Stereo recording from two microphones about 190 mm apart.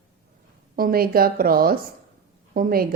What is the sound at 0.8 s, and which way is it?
Speech, 50° right (ahead or behind).